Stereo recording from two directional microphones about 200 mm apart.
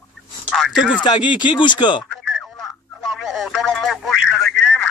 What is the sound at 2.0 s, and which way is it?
Telephone, centre (ahead or behind).